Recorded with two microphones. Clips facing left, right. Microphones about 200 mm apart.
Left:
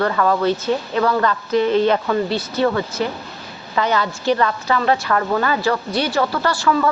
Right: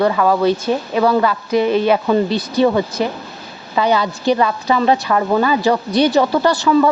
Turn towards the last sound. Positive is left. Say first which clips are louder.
# right 5 dB
turn(degrees=-20)  # may be behind; listen again after turning